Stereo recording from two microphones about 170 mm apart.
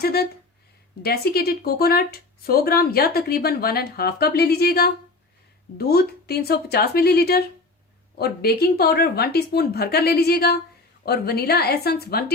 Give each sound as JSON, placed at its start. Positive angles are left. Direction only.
{"t": 0.0, "sound": "a woman's voice", "side_deg": 65}